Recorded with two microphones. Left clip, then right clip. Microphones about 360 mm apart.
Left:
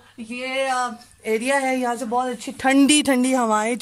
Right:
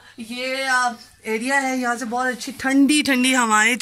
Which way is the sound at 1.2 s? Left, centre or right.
Left.